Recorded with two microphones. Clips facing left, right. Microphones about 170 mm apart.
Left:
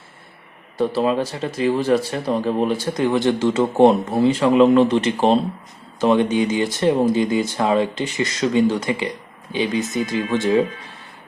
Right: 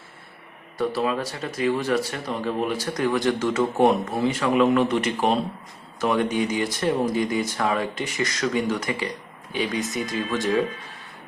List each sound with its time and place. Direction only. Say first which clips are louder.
0.8 s speech: left 5 dB; 30° left (ahead or behind)